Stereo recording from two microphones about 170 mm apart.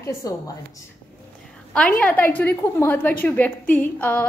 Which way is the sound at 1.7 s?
5° left (ahead or behind).